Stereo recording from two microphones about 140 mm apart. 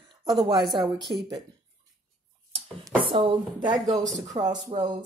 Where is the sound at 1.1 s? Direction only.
Centre (ahead or behind).